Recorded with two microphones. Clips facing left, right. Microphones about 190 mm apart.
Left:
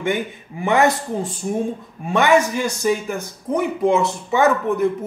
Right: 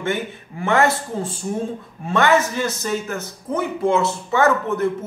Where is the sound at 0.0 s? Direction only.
15° left (ahead or behind).